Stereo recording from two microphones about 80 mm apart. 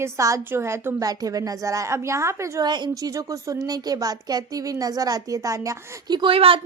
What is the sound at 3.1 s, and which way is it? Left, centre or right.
A woman's voice, right.